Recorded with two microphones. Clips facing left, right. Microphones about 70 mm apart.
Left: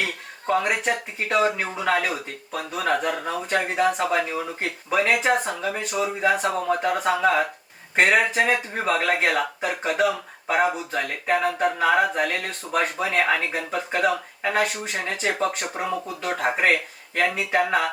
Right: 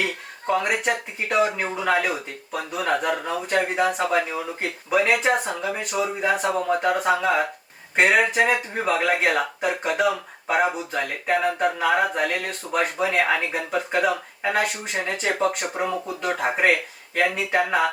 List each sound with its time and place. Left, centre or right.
0.4 s speech: centre